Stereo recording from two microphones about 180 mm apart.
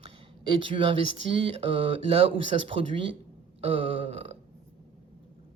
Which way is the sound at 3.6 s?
30° right (ahead or behind).